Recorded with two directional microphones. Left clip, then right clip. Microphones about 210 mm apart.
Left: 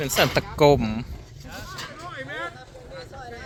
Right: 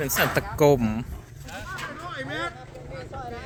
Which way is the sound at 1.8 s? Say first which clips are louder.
Right 1 dB; 5° left (ahead or behind).